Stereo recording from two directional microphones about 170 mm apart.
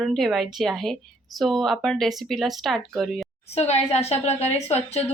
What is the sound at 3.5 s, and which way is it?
A woman's voice, 40° left (ahead or behind).